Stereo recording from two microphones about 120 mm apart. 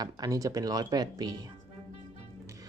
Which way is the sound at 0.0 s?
30° right (ahead or behind).